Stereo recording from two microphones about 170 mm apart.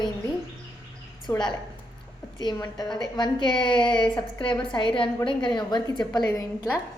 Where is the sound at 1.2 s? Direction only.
25° left (ahead or behind).